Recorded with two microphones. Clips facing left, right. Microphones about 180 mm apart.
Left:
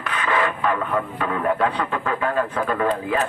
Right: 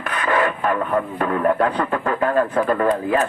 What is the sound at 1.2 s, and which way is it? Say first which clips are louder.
Speech: right 3 dB; 45° right (ahead or behind).